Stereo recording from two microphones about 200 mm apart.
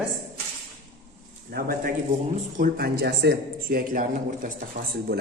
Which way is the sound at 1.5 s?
50° right (ahead or behind).